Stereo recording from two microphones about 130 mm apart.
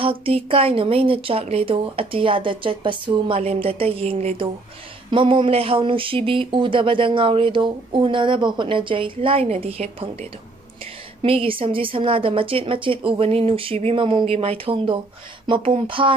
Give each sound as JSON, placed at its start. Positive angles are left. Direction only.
{"t": 0.0, "sound": "speech", "side_deg": -45}
{"t": 5.1, "sound": "speech", "side_deg": -40}
{"t": 11.2, "sound": "speech", "side_deg": -45}